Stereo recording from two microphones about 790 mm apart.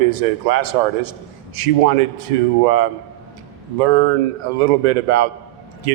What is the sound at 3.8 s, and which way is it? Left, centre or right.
A man's voice, right.